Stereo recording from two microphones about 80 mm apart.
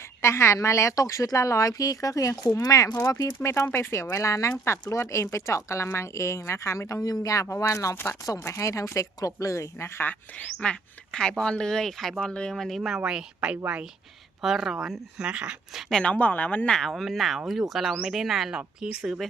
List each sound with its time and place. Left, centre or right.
0.2 s speech: left
3.4 s speech: left
4.1 s speech: left
10.6 s speech: centre
13.0 s speech: centre
15.8 s speech: centre
16.1 s speech: centre
16.7 s speech: centre